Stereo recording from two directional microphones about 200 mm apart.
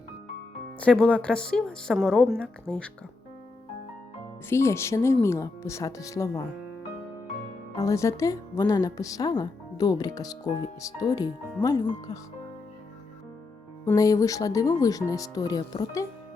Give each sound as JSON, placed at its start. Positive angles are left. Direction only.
{"t": 0.8, "sound": "speech", "side_deg": 5}
{"t": 4.4, "sound": "speech", "side_deg": 15}
{"t": 7.8, "sound": "speech", "side_deg": 15}
{"t": 13.8, "sound": "speech", "side_deg": 15}